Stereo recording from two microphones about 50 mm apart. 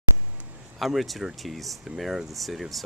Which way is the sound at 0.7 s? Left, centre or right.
Centre.